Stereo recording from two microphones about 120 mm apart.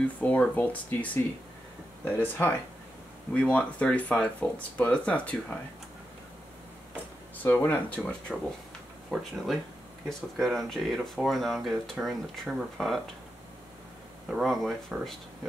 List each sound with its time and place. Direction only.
0.0 s speech: 10° left (ahead or behind)
7.4 s speech: 20° left (ahead or behind); by 13.0 s centre (ahead or behind)
14.3 s speech: centre (ahead or behind)